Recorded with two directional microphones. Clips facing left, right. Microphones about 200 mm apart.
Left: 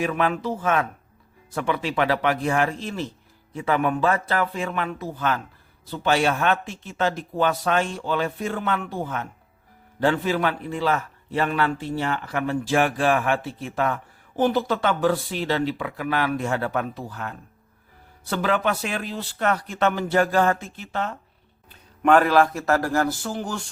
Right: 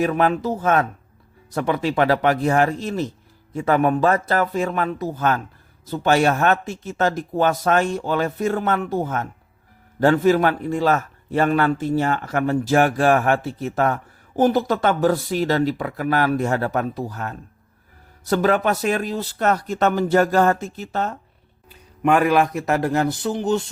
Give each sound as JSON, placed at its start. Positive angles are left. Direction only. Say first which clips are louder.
{"t": 0.0, "sound": "a man's voice", "louder": "right 4 dB", "side_deg": -40}
{"t": 21.7, "sound": "a man's voice", "louder": "left 1 dB", "side_deg": -10}